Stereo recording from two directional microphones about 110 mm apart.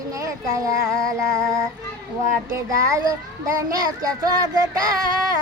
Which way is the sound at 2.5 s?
30° right (ahead or behind).